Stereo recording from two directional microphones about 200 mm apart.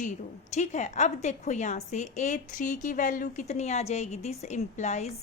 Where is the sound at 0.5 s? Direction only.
35° left (ahead or behind).